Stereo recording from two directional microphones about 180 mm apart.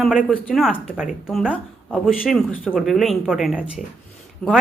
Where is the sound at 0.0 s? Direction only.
5° right (ahead or behind).